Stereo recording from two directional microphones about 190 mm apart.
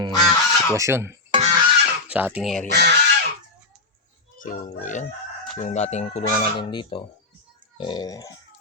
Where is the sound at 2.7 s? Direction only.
60° right (ahead or behind).